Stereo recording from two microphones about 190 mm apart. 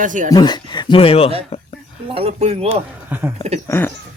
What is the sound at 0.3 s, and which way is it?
Speech, 20° left (ahead or behind).